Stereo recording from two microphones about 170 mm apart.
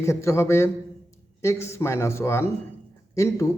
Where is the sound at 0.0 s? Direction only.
15° left (ahead or behind).